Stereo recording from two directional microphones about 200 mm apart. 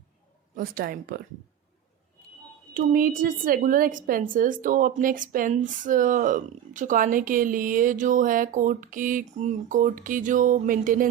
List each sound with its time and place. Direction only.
0.5 s a woman's voice: 45° right (ahead or behind)
2.7 s a woman's voice: 45° right (ahead or behind)